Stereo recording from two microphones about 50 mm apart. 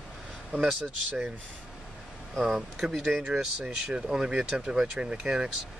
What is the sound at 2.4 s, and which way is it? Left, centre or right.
Speech, centre.